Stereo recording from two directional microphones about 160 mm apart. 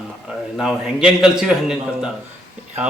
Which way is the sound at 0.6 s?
5° right (ahead or behind).